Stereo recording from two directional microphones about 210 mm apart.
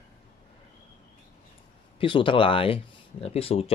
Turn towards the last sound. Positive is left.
turn(degrees=30)  # may be behind; listen again after turning